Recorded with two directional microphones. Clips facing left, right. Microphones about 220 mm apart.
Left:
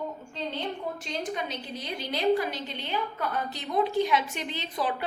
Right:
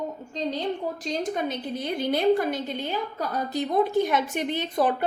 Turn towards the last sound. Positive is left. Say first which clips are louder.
# right 7 dB
turn(degrees=-50)  # may be behind; listen again after turning